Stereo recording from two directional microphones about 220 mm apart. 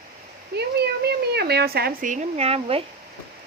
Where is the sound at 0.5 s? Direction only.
50° right (ahead or behind); by 2.8 s 25° right (ahead or behind).